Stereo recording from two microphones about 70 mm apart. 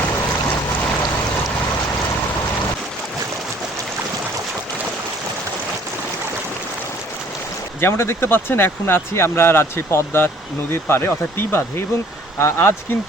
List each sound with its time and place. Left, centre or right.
7.8 s speech: left